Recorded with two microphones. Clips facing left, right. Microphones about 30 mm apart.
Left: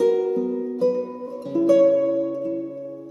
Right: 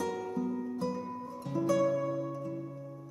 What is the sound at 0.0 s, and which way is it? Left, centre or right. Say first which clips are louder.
Music: left 14 dB; left.